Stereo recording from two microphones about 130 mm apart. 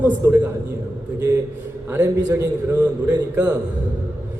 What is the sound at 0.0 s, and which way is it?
Speech, 15° right (ahead or behind).